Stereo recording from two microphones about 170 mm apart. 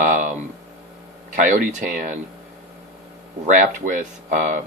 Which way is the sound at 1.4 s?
50° right (ahead or behind).